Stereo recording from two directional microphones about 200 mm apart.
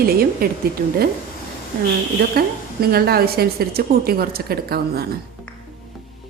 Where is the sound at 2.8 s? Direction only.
50° right (ahead or behind).